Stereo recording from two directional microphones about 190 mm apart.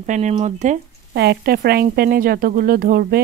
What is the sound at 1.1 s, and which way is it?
Speech, 60° right (ahead or behind).